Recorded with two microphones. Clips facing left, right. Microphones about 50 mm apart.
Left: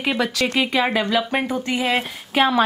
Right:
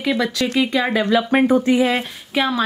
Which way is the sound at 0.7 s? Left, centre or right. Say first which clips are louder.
Right 1 dB; left.